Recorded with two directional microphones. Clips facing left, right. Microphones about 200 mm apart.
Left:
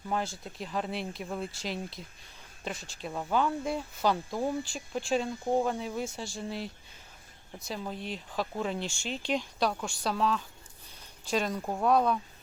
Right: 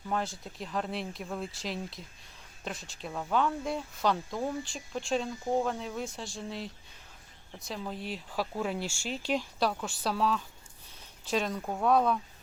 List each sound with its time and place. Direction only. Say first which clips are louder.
0.1 s speech: even; centre (ahead or behind)